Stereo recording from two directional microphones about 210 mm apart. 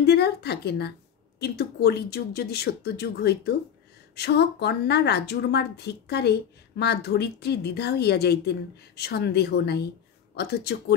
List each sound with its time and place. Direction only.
0.0 s a woman's voice: 50° left (ahead or behind)